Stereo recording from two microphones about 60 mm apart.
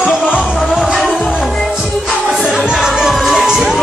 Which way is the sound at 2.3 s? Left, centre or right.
Centre.